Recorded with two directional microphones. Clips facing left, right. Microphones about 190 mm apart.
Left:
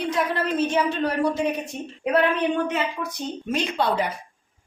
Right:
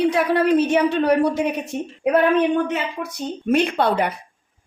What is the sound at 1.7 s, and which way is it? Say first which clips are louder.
Speech: right 6 dB; 55° right (ahead or behind).